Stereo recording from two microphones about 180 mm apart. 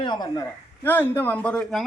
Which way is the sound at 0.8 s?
10° left (ahead or behind).